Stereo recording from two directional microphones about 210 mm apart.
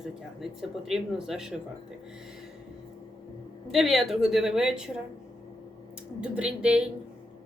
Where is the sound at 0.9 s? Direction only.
Centre (ahead or behind).